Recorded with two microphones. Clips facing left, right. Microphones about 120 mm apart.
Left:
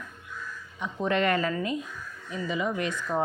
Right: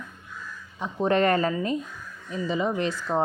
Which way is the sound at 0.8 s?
35° right (ahead or behind).